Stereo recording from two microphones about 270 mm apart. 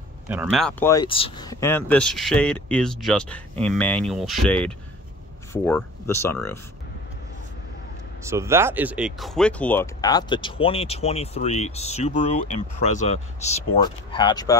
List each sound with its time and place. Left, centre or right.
0.3 s speech: centre
8.2 s speech: centre